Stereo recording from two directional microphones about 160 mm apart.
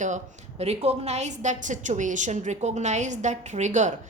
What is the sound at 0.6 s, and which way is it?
A woman's voice, 40° right (ahead or behind).